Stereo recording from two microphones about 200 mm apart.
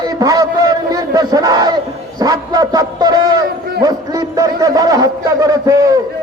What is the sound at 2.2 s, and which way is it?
Dog, 20° right (ahead or behind).